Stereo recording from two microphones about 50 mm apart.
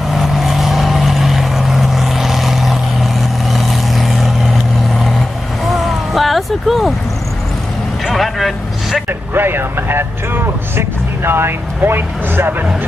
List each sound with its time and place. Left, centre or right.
0.1 s vehicle: centre
8.1 s vehicle: centre
9.3 s vehicle: right